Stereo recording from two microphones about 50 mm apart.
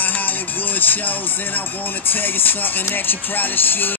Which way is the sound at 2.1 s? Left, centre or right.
Left.